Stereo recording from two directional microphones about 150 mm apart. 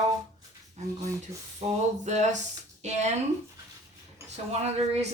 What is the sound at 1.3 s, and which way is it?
A woman's voice, 45° right (ahead or behind).